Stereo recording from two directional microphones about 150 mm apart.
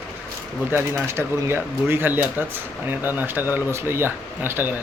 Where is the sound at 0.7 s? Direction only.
15° right (ahead or behind).